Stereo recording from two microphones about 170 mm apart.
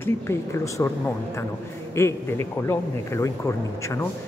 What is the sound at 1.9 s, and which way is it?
Speech, 15° left (ahead or behind).